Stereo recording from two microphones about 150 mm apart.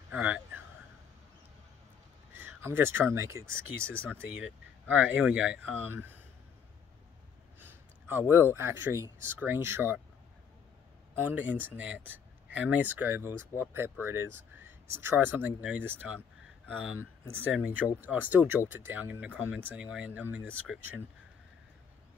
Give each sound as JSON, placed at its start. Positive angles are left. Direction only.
{"t": 0.1, "sound": "speech", "side_deg": -10}
{"t": 2.3, "sound": "speech", "side_deg": -15}
{"t": 7.6, "sound": "a sound", "side_deg": -15}
{"t": 8.5, "sound": "speech", "side_deg": -20}
{"t": 11.2, "sound": "speech", "side_deg": -10}